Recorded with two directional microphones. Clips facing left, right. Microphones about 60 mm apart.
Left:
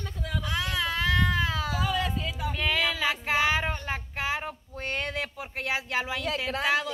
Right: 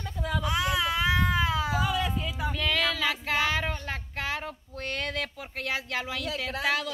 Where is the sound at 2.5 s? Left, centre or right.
Centre.